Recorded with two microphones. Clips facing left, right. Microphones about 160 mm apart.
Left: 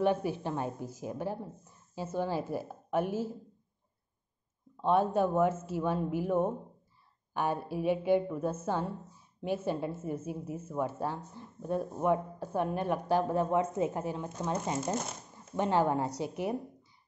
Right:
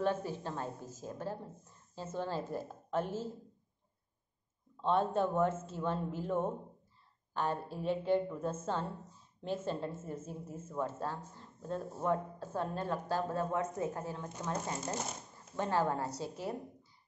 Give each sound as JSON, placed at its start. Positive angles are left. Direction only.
{"t": 0.0, "sound": "speech", "side_deg": 15}
{"t": 4.8, "sound": "speech", "side_deg": 10}